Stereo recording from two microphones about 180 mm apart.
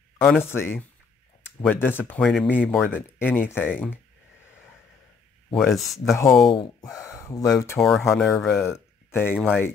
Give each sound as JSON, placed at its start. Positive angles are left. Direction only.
{"t": 0.4, "sound": "speech", "side_deg": 15}
{"t": 5.5, "sound": "speech", "side_deg": 0}
{"t": 6.5, "sound": "speech", "side_deg": 25}
{"t": 8.2, "sound": "speech", "side_deg": 0}
{"t": 8.6, "sound": "a sound", "side_deg": 15}
{"t": 9.3, "sound": "speech", "side_deg": -5}